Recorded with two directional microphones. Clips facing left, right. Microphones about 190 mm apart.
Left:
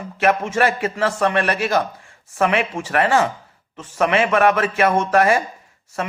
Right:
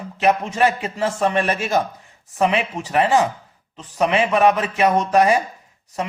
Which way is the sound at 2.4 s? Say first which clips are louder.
Even; 15° right (ahead or behind).